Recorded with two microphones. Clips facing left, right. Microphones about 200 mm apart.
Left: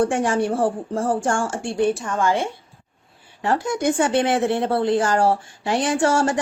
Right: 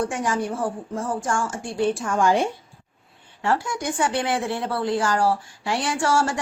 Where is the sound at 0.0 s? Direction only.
30° left (ahead or behind).